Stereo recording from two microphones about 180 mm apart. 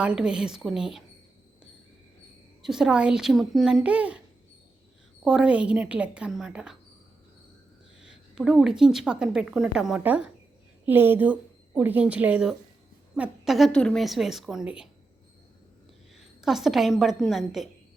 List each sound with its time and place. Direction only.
0.0 s a woman's voice: 5° right (ahead or behind)
2.6 s a woman's voice: centre (ahead or behind)
5.2 s a woman's voice: 5° right (ahead or behind)
8.4 s a woman's voice: 5° right (ahead or behind)
16.1 s a woman's voice: centre (ahead or behind)